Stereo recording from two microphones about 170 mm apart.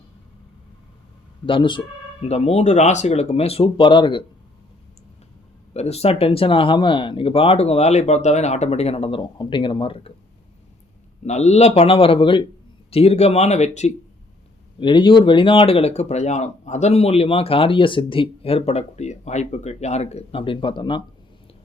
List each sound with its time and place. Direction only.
1.5 s speech: 30° left (ahead or behind)
5.7 s speech: 40° left (ahead or behind)
11.3 s speech: 40° left (ahead or behind)
14.8 s speech: 30° left (ahead or behind)